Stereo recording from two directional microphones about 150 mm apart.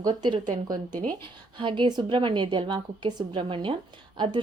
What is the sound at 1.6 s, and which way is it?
A woman's voice, 30° right (ahead or behind).